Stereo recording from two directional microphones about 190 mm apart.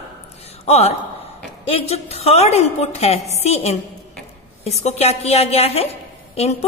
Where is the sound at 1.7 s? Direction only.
35° left (ahead or behind).